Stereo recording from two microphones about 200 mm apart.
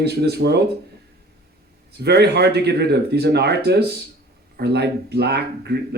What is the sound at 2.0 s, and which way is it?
Speech, 55° right (ahead or behind).